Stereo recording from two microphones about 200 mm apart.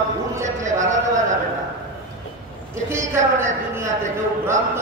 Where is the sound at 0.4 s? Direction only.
35° right (ahead or behind).